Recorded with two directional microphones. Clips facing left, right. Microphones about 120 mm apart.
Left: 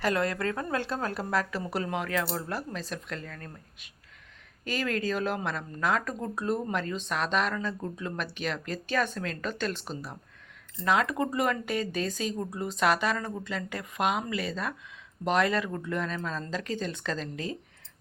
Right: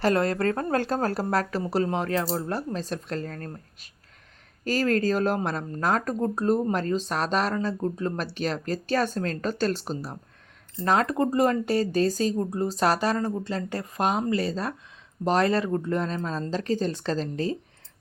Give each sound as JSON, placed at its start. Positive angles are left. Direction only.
{"t": 0.0, "sound": "speech", "side_deg": -35}